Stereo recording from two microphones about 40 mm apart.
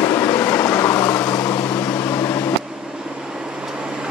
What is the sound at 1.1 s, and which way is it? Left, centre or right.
Vehicle, left.